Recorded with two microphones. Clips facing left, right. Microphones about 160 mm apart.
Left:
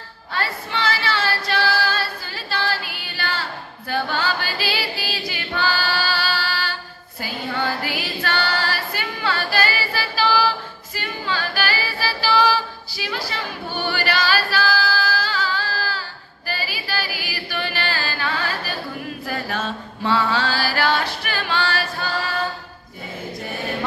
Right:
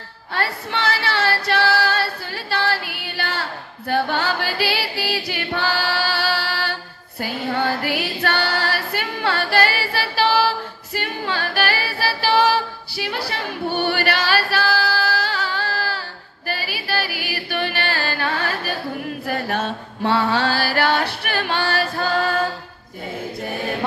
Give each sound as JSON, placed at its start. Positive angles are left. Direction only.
{"t": 0.3, "sound": "female singing", "side_deg": -60}
{"t": 3.9, "sound": "choir", "side_deg": -60}
{"t": 7.8, "sound": "singing", "side_deg": -60}
{"t": 11.0, "sound": "a capella", "side_deg": -60}
{"t": 16.4, "sound": "a sound", "side_deg": -60}
{"t": 19.2, "sound": "mantra", "side_deg": -60}